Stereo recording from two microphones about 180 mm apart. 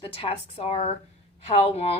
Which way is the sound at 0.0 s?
30° left (ahead or behind).